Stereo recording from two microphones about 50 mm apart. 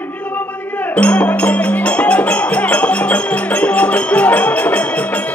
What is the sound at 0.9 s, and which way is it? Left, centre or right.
Speech, left.